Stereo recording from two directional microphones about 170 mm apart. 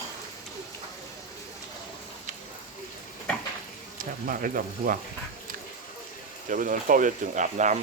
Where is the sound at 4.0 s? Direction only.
55° right (ahead or behind).